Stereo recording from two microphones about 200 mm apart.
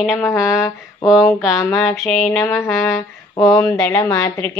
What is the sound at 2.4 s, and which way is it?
Speech, 15° left (ahead or behind).